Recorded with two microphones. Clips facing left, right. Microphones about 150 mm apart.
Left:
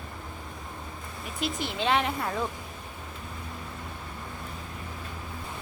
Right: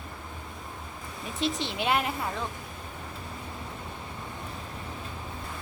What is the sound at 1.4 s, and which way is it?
Speech, 20° right (ahead or behind).